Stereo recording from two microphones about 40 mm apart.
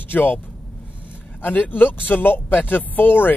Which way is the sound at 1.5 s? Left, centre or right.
Left.